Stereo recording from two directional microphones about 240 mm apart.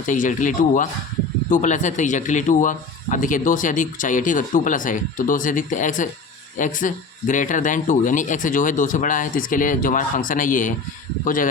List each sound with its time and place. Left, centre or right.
0.0 s a man's voice: left